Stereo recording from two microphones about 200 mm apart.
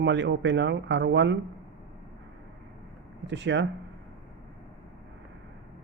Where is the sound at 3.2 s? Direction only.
60° right (ahead or behind).